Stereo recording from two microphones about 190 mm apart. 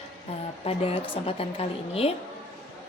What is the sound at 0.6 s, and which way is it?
A woman's voice, 30° left (ahead or behind).